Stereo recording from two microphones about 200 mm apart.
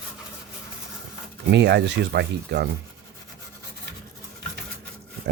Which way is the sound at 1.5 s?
60° right (ahead or behind).